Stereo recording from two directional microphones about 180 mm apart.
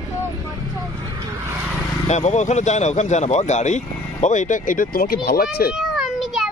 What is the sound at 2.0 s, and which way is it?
A man's voice, 40° left (ahead or behind).